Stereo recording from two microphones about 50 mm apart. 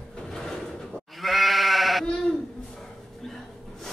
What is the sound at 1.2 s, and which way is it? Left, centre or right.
Sheep, centre.